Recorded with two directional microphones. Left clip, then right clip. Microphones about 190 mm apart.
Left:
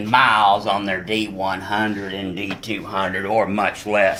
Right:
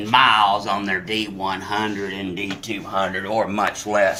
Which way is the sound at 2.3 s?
45° left (ahead or behind).